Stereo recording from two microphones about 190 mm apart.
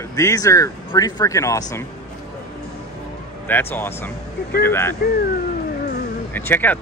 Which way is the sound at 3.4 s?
10° left (ahead or behind).